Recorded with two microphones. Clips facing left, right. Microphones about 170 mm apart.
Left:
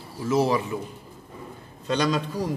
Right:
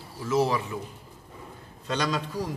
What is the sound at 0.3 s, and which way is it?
Speech, 10° left (ahead or behind).